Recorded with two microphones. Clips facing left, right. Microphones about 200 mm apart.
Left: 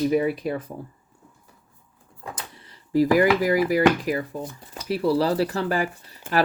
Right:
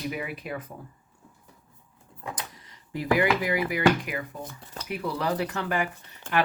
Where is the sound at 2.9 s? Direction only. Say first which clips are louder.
Left 6 dB; 40° left (ahead or behind).